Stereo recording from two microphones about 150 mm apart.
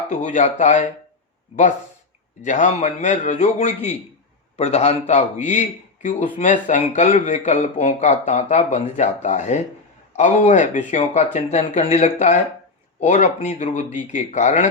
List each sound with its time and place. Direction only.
0.1 s speech: 55° left (ahead or behind)
2.4 s a man's voice: 55° left (ahead or behind)